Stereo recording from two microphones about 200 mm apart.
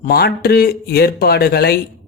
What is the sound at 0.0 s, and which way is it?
A man's voice, 50° left (ahead or behind).